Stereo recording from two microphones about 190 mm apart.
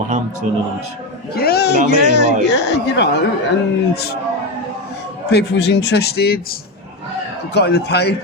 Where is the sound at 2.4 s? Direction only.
65° left (ahead or behind).